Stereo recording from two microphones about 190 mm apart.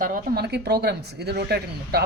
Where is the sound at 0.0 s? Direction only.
50° right (ahead or behind).